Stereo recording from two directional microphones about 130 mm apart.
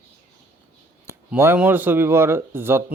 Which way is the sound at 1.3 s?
15° right (ahead or behind).